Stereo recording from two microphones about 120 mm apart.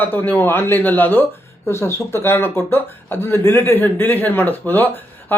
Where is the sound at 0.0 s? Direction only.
15° left (ahead or behind).